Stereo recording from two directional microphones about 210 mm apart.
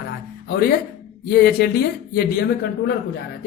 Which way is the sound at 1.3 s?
50° left (ahead or behind).